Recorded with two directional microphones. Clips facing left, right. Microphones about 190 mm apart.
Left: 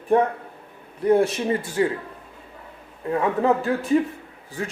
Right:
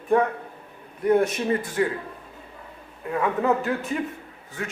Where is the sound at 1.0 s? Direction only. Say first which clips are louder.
Left 2 dB; 30° left (ahead or behind).